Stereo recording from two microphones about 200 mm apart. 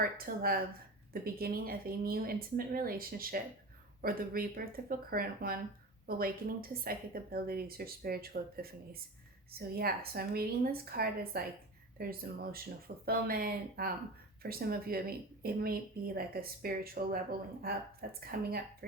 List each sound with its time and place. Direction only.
0.0 s speech: 45° right (ahead or behind)
18.2 s speech: 50° right (ahead or behind)